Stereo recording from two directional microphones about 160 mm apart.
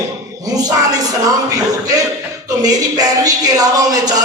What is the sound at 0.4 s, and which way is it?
Speech, 25° right (ahead or behind).